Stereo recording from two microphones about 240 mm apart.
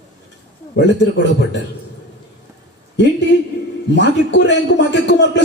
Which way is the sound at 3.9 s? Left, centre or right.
Left.